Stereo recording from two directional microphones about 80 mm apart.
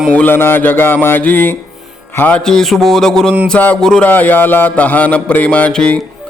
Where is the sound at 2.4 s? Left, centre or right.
Centre.